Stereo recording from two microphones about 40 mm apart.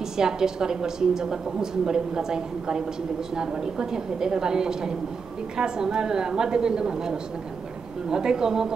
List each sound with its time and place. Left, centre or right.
0.2 s a woman's voice: centre